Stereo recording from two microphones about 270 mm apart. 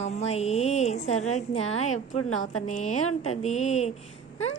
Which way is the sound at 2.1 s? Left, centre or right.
Left.